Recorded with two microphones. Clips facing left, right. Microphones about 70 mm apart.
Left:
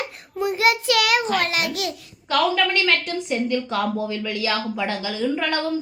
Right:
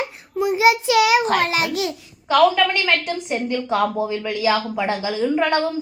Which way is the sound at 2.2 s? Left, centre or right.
Centre.